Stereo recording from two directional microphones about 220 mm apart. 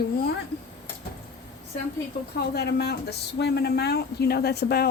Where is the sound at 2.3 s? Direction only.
45° left (ahead or behind).